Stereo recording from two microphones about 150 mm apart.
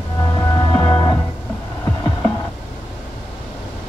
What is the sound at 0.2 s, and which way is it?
Music, 25° left (ahead or behind).